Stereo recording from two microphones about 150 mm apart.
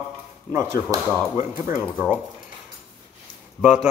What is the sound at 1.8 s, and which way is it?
Speech, 10° left (ahead or behind).